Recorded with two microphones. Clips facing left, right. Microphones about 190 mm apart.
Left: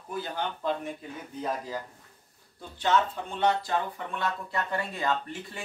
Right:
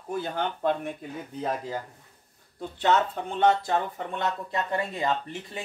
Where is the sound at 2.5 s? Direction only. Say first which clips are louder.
Right 2 dB; 65° right (ahead or behind).